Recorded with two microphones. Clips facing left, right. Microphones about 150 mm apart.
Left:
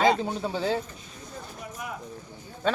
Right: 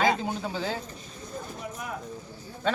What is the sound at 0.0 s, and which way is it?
Speech, 25° left (ahead or behind).